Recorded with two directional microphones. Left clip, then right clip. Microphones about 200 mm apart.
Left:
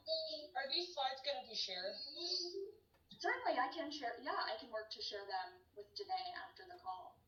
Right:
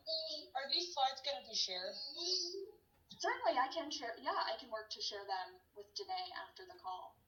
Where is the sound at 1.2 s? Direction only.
35° right (ahead or behind).